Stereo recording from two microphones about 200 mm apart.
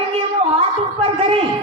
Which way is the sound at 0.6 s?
30° right (ahead or behind).